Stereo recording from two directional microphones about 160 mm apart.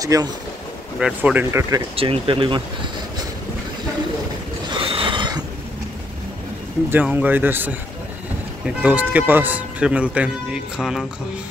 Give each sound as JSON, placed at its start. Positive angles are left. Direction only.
{"t": 0.0, "sound": "speech", "side_deg": -20}
{"t": 0.9, "sound": "speech", "side_deg": -5}
{"t": 2.0, "sound": "speech", "side_deg": -35}
{"t": 4.6, "sound": "train", "side_deg": -35}
{"t": 6.9, "sound": "speech", "side_deg": -10}
{"t": 8.8, "sound": "speech", "side_deg": -10}